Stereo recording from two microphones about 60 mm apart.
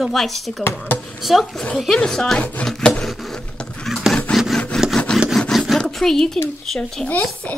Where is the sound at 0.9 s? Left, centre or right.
Centre.